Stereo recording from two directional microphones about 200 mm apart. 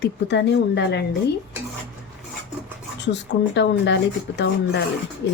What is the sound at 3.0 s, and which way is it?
Speech, 60° left (ahead or behind).